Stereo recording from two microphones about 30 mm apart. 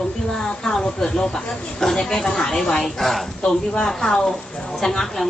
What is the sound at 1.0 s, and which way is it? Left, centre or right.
Speech, left.